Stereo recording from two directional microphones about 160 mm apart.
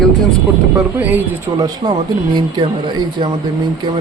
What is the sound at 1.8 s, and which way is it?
Speech, 35° right (ahead or behind).